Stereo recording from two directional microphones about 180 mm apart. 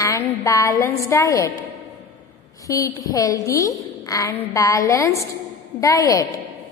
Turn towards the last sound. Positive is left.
turn(degrees=20)  # may be behind; listen again after turning